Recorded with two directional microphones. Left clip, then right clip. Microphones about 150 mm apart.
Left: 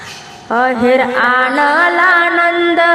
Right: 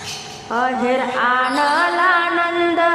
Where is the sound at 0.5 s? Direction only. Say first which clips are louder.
Left 7 dB; 25° left (ahead or behind).